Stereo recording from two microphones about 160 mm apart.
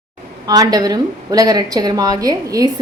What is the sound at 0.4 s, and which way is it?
A woman's voice, 25° right (ahead or behind).